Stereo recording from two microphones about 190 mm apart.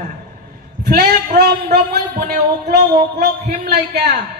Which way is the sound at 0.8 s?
50° right (ahead or behind).